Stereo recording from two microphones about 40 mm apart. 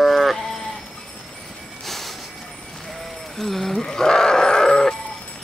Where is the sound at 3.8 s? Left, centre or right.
Centre.